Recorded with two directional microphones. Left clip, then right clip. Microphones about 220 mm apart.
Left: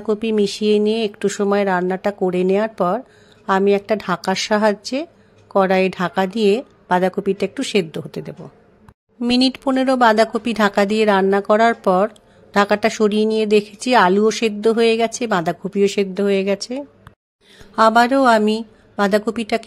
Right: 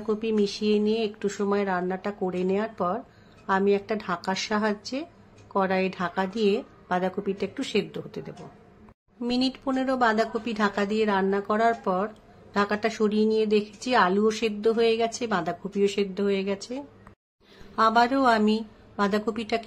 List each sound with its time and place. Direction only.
0.0 s speech: 35° left (ahead or behind)